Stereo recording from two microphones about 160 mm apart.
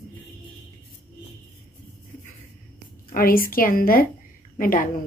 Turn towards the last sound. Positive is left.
turn(degrees=60)  # may be behind; listen again after turning